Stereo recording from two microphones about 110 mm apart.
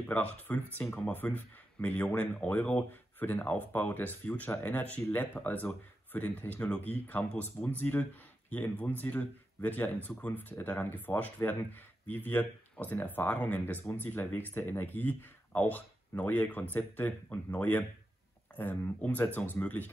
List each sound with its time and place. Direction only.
0.1 s speech: 15° left (ahead or behind)